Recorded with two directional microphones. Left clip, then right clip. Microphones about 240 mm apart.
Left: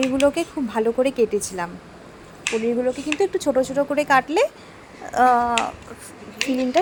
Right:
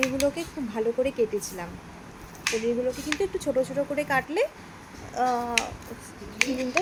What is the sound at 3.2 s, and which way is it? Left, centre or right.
Speech, centre.